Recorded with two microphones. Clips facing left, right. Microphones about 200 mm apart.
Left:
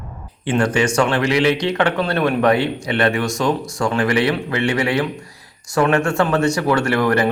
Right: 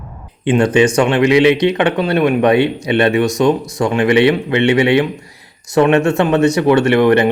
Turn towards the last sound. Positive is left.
turn(degrees=-20)  # may be behind; listen again after turning